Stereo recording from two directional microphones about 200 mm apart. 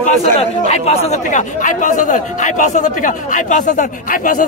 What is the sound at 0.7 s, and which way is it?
Speech, 30° left (ahead or behind).